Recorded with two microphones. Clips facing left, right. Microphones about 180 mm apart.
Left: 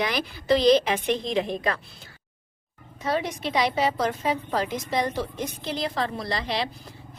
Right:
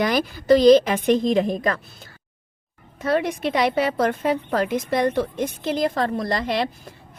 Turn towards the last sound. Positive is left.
turn(degrees=-50)  # may be behind; listen again after turning